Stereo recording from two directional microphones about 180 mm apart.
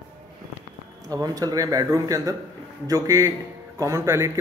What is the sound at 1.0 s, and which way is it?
A man's voice, 20° right (ahead or behind).